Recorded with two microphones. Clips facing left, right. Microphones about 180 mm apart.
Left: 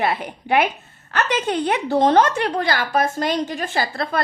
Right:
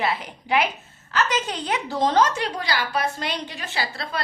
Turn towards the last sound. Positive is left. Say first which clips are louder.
# left 6 dB
turn(degrees=55)  # may be behind; listen again after turning